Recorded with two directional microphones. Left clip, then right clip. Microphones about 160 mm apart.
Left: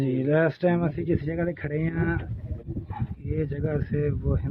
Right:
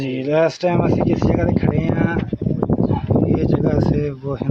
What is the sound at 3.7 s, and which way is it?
Speech, 10° right (ahead or behind).